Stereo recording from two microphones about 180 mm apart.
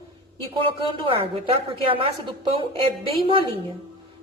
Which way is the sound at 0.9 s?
30° right (ahead or behind).